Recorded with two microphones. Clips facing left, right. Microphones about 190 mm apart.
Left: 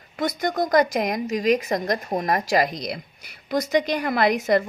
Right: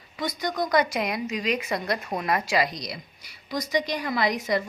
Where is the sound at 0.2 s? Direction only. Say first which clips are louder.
Left 4 dB; 50° left (ahead or behind).